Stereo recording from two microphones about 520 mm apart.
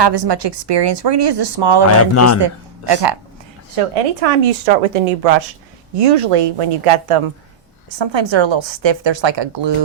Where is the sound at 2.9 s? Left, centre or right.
Right.